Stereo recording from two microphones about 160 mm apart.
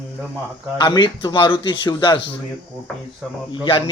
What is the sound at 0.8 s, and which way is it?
A man's voice, 30° left (ahead or behind).